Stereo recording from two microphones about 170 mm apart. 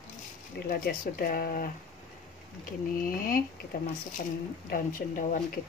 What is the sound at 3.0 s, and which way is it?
Speech, 55° left (ahead or behind).